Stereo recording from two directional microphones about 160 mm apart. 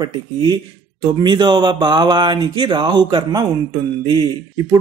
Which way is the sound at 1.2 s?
30° right (ahead or behind).